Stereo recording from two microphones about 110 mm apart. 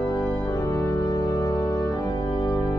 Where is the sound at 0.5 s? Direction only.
30° left (ahead or behind).